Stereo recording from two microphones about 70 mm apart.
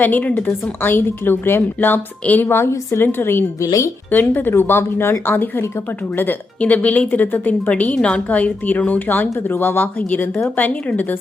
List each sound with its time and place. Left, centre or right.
0.0 s a woman's voice: left
3.6 s speech: left
4.1 s a woman's voice: left
6.6 s a woman's voice: centre